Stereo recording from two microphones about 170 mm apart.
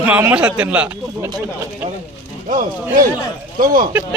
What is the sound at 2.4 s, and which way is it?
Speech, 50° right (ahead or behind).